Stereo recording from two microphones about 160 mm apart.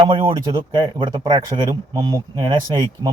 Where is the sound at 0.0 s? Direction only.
30° right (ahead or behind).